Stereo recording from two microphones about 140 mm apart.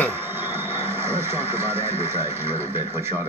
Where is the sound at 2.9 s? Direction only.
15° right (ahead or behind).